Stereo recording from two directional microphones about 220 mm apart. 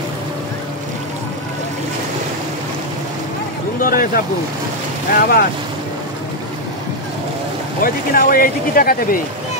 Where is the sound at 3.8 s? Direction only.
40° left (ahead or behind).